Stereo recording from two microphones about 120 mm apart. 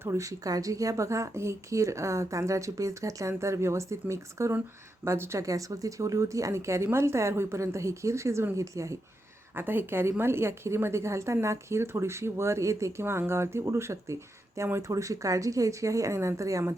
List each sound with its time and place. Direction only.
0.0 s a woman's voice: 25° right (ahead or behind)